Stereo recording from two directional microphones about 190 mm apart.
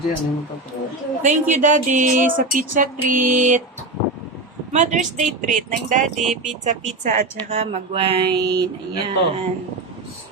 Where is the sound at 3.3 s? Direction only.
40° right (ahead or behind).